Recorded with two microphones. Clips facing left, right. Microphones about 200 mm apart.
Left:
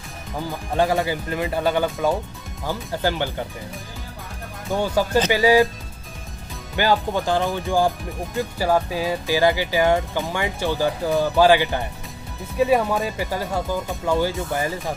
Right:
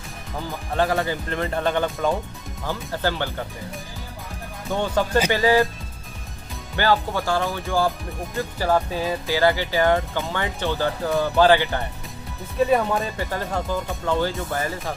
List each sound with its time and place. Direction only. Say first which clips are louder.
0.7 s speech: left 2 dB; 15° left (ahead or behind)
4.6 s speech: left 1 dB; 10° left (ahead or behind)
6.8 s speech: left 1 dB; 15° left (ahead or behind)